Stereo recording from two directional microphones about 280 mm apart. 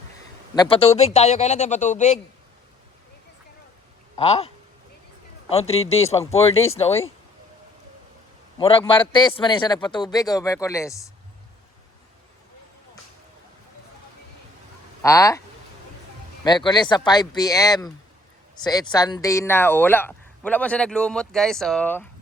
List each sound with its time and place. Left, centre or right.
0.5 s speech: centre
4.2 s speech: left
8.5 s speech: centre
15.0 s speech: centre
16.4 s speech: centre